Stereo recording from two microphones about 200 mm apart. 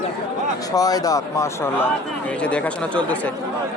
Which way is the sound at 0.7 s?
20° left (ahead or behind).